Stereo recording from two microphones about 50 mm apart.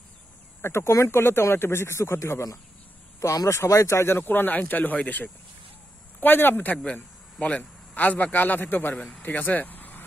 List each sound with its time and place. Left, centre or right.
0.6 s speech: left
3.2 s speech: left
4.2 s a man's voice: left
6.2 s a man's voice: left
6.8 s speech: centre
7.9 s a man's voice: left